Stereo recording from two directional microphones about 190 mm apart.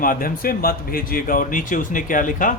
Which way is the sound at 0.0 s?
50° left (ahead or behind).